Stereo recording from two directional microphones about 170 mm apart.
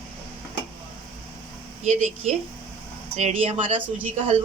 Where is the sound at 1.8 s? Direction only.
45° right (ahead or behind).